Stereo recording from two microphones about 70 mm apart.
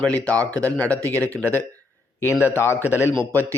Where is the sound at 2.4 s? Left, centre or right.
Left.